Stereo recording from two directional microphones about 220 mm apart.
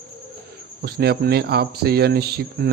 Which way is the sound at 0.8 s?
45° right (ahead or behind).